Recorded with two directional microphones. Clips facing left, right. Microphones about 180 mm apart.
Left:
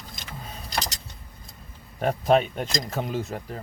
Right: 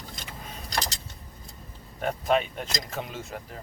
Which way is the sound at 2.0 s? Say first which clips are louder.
Left 4 dB; 40° left (ahead or behind).